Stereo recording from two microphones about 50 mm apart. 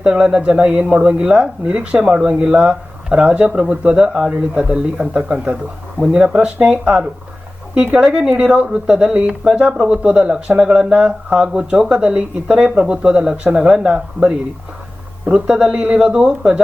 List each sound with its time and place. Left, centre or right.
0.0 s speech: centre